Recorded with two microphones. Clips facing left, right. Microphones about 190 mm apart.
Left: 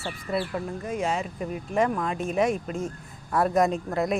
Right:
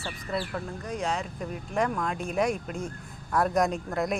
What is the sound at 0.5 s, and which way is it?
Speech, 5° left (ahead or behind).